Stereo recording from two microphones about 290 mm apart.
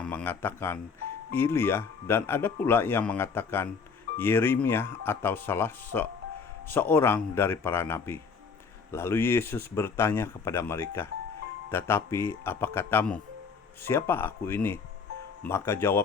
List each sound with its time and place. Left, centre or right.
0.0 s speech: centre